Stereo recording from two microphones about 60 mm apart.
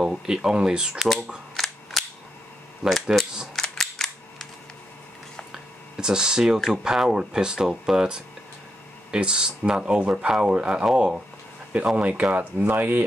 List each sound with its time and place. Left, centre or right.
0.0 s speech: centre
1.6 s cap gun: centre
2.9 s speech: centre
3.7 s cap gun: centre
5.5 s speech: centre; by 13.0 s right